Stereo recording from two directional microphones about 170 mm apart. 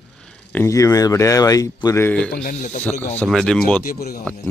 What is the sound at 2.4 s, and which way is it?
Speech, 45° left (ahead or behind).